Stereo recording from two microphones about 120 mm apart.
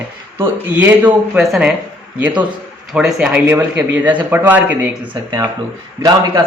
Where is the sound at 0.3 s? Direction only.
15° right (ahead or behind).